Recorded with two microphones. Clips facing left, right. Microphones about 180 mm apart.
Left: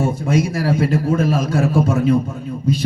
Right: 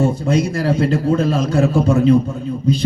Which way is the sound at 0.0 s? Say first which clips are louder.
Right 2 dB; 10° left (ahead or behind).